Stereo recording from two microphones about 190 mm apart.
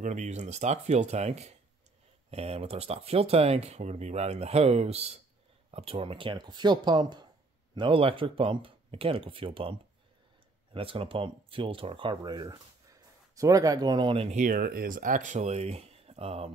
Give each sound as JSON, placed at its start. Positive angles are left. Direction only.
{"t": 0.0, "sound": "speech", "side_deg": -40}
{"t": 14.4, "sound": "speech", "side_deg": -50}